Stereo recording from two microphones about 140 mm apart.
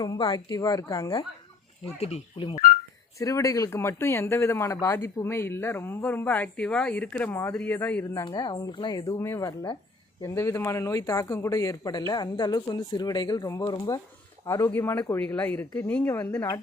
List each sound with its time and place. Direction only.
0.0 s speech: 25° left (ahead or behind)
2.0 s speech: 50° left (ahead or behind)
3.2 s speech: 20° left (ahead or behind)
8.2 s speech: 30° left (ahead or behind)